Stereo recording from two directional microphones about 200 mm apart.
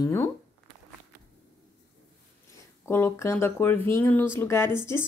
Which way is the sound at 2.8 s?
10° left (ahead or behind).